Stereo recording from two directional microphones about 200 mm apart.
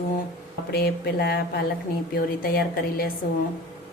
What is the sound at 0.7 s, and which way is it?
A woman's voice, 50° left (ahead or behind).